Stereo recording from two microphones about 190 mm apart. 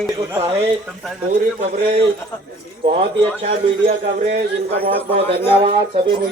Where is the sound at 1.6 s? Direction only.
35° right (ahead or behind).